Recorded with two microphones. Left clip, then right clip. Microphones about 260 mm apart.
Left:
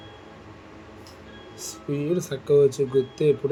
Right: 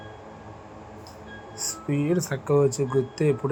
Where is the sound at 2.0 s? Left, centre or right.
Centre.